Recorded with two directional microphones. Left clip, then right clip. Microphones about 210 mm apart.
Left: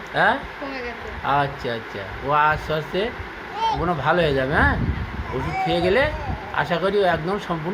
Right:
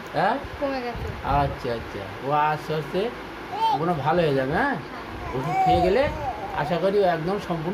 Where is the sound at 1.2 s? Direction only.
10° left (ahead or behind).